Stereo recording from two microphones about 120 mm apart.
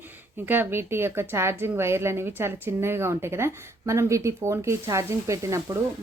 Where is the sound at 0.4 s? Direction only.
15° right (ahead or behind).